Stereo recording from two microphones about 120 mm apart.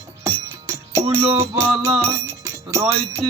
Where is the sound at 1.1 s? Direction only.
25° right (ahead or behind).